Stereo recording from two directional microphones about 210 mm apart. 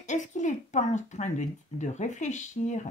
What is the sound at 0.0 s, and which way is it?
Speech, 35° left (ahead or behind).